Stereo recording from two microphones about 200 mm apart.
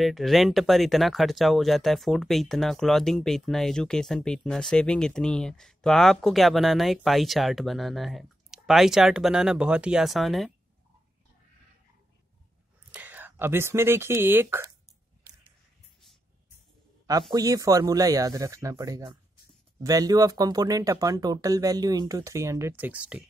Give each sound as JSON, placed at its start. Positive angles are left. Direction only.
{"t": 0.0, "sound": "speech", "side_deg": 0}
{"t": 12.9, "sound": "speech", "side_deg": -10}
{"t": 17.3, "sound": "speech", "side_deg": -20}